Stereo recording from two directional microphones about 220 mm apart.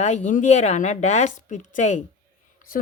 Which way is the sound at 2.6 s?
40° left (ahead or behind).